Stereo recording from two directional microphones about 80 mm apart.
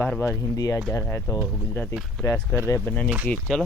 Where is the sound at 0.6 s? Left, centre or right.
Left.